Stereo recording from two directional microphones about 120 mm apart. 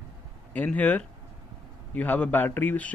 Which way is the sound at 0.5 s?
15° left (ahead or behind).